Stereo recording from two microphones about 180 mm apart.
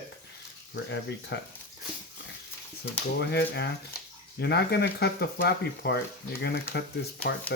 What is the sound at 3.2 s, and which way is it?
Speech, 70° left (ahead or behind).